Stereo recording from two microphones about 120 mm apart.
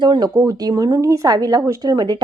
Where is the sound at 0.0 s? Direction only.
35° right (ahead or behind).